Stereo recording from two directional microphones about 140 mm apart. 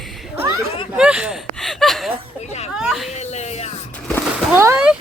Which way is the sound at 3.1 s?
55° left (ahead or behind).